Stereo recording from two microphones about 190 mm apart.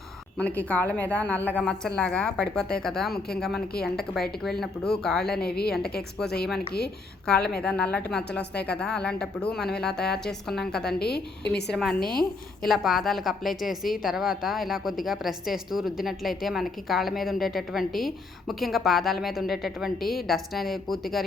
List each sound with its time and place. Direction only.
0.3 s a woman's voice: 5° left (ahead or behind)
5.4 s a woman's voice: 55° left (ahead or behind)
6.0 s a woman's voice: 5° left (ahead or behind)